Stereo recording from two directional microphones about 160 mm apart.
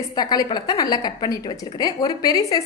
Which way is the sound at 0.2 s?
25° left (ahead or behind).